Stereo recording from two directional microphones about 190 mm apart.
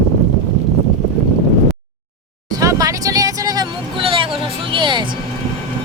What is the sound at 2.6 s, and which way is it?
Vehicle, 20° right (ahead or behind).